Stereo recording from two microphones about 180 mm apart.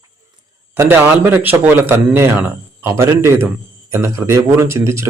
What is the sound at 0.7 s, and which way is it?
A man's voice, 10° right (ahead or behind).